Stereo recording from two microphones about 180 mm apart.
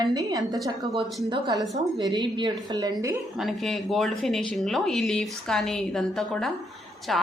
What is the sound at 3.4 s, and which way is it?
Speech, centre (ahead or behind).